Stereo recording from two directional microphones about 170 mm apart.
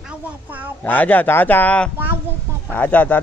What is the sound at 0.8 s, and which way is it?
Speech, 10° left (ahead or behind).